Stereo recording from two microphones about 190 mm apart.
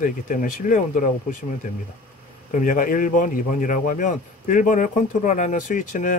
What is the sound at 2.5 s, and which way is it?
A man's voice, 45° left (ahead or behind).